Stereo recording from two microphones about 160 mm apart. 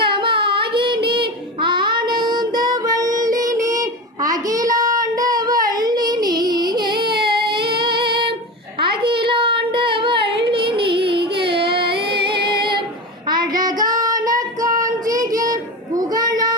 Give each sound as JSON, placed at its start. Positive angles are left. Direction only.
{"t": 0.0, "sound": "child singing", "side_deg": -30}
{"t": 7.7, "sound": "female singing", "side_deg": -30}
{"t": 8.9, "sound": "child singing", "side_deg": -30}
{"t": 12.1, "sound": "music", "side_deg": -30}
{"t": 12.5, "sound": "singing", "side_deg": -30}
{"t": 13.2, "sound": "child singing", "side_deg": -25}